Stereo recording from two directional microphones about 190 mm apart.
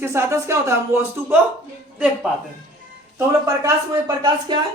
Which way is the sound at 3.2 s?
15° right (ahead or behind).